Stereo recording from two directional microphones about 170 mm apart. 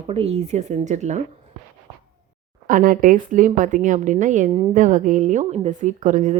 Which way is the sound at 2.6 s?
55° right (ahead or behind).